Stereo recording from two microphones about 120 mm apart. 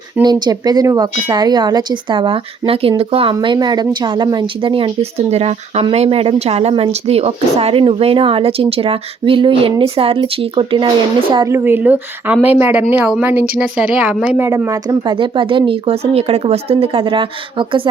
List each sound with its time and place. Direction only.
0.2 s speech: 35° right (ahead or behind)
11.4 s speech: 20° right (ahead or behind); by 14.3 s 5° right (ahead or behind)
14.3 s speech: 20° right (ahead or behind)
15.1 s speech: 45° right (ahead or behind)